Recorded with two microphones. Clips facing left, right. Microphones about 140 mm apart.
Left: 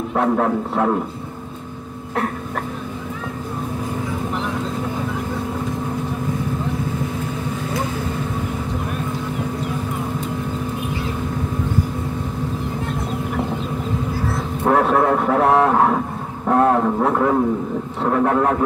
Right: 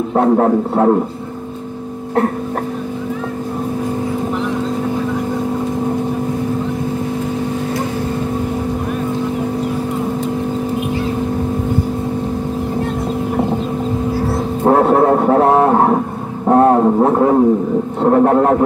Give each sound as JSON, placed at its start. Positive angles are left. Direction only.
{"t": 0.1, "sound": "a man's voice", "side_deg": -30}
{"t": 14.6, "sound": "a sound", "side_deg": -25}
{"t": 18.0, "sound": "a man's voice", "side_deg": -35}